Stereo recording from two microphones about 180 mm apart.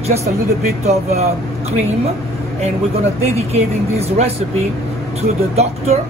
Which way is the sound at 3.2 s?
35° right (ahead or behind).